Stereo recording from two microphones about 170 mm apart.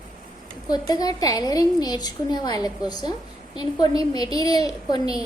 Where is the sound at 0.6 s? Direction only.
25° left (ahead or behind).